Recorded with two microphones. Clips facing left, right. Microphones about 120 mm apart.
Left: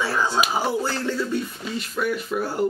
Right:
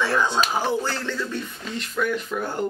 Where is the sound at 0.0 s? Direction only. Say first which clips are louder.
Right 1 dB; 10° left (ahead or behind).